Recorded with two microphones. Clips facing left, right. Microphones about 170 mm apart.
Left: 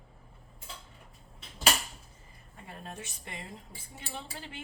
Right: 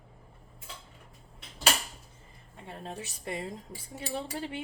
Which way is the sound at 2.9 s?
35° right (ahead or behind).